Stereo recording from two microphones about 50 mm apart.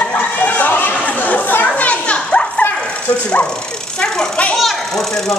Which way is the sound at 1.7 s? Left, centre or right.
Left.